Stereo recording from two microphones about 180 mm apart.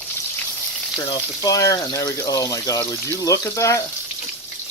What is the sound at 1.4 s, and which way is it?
Speech, 20° left (ahead or behind).